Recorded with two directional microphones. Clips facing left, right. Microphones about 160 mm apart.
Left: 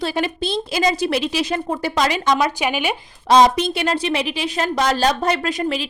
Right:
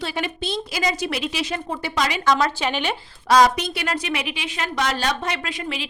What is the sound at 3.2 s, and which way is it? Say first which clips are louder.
A woman's voice: left 3 dB; 25° left (ahead or behind).